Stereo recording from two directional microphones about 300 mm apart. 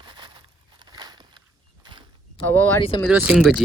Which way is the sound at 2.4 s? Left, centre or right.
Centre.